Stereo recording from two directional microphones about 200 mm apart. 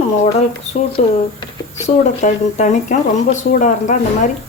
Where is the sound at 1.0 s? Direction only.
35° left (ahead or behind).